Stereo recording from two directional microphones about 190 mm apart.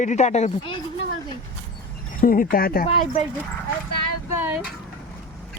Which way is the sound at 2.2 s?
45° left (ahead or behind).